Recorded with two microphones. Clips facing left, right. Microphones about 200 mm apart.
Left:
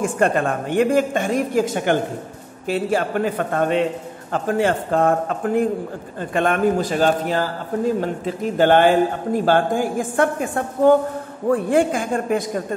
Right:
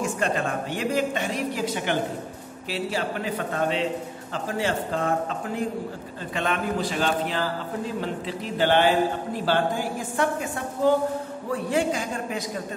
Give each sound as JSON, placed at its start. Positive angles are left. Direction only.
{"t": 0.0, "sound": "a man's voice", "side_deg": 55}